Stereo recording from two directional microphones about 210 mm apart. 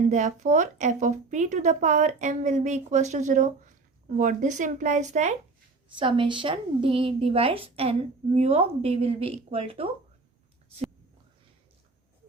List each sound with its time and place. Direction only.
0.1 s a woman's voice: 35° right (ahead or behind)
6.0 s a woman's voice: 25° right (ahead or behind)